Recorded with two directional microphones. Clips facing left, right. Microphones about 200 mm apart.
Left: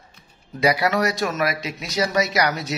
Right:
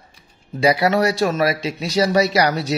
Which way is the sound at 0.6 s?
30° right (ahead or behind).